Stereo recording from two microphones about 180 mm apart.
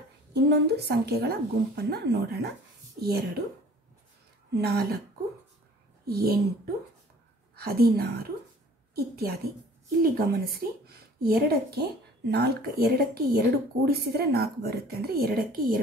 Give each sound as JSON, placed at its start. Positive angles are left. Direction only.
{"t": 0.3, "sound": "a woman's voice", "side_deg": -65}
{"t": 4.6, "sound": "a woman's voice", "side_deg": -60}
{"t": 6.0, "sound": "a woman's voice", "side_deg": -60}